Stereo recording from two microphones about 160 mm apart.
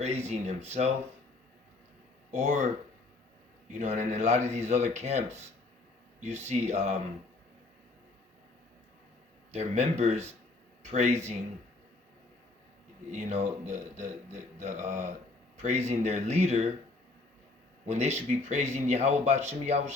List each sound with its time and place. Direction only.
0.0 s speech: 45° right (ahead or behind)
2.3 s speech: 50° right (ahead or behind)
3.8 s speech: 45° right (ahead or behind)
9.5 s speech: 45° right (ahead or behind)
13.1 s speech: 45° right (ahead or behind)
17.8 s speech: 45° right (ahead or behind)